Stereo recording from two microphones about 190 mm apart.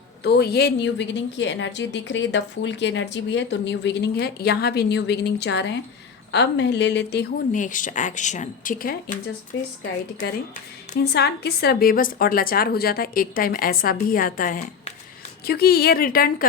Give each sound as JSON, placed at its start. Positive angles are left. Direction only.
{"t": 0.2, "sound": "a woman's voice", "side_deg": 60}
{"t": 7.5, "sound": "a woman's voice", "side_deg": 45}
{"t": 9.5, "sound": "a woman's voice", "side_deg": 75}
{"t": 11.0, "sound": "a woman's voice", "side_deg": 55}